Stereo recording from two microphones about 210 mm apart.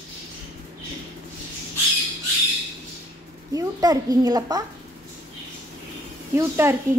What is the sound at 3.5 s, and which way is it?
A child's voice, 15° right (ahead or behind).